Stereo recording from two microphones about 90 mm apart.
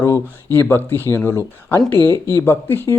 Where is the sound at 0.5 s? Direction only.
25° left (ahead or behind).